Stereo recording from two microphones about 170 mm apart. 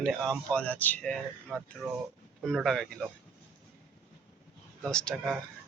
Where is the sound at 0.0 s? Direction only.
Centre (ahead or behind).